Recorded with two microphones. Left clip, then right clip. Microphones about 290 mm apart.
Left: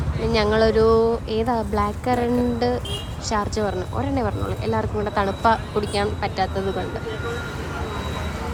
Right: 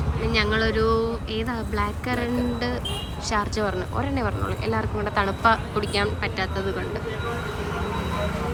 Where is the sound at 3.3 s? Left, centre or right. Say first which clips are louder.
Left 2 dB; centre.